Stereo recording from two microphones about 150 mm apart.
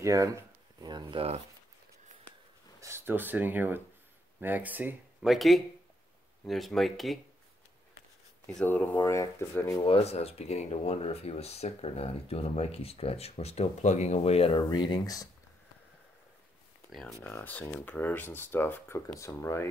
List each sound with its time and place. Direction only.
0.0 s speech: 20° right (ahead or behind)
2.8 s speech: 15° right (ahead or behind)
5.3 s speech: centre (ahead or behind)
8.5 s speech: 10° left (ahead or behind)
9.8 s speech: 40° left (ahead or behind); by 15.2 s 25° left (ahead or behind)
17.2 s speech: 10° left (ahead or behind)